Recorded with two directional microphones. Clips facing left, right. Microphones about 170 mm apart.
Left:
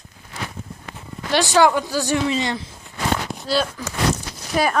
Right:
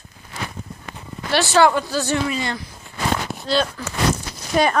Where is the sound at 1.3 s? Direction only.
15° left (ahead or behind).